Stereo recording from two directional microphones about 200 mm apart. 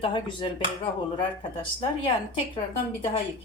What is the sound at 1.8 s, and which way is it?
Speech, 25° left (ahead or behind).